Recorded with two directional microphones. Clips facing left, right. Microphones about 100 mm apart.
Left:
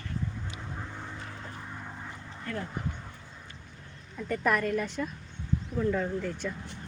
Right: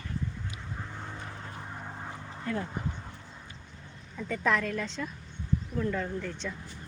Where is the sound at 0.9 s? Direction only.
10° right (ahead or behind).